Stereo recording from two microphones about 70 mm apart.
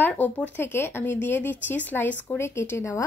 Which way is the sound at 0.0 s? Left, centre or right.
Left.